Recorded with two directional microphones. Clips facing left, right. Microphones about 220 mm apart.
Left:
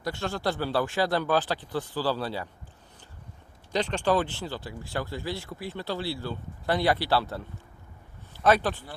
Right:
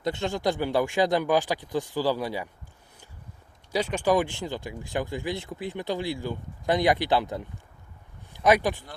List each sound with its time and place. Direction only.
0.0 s speech: 20° right (ahead or behind)
3.7 s speech: 10° right (ahead or behind)
8.3 s a sound: 15° right (ahead or behind)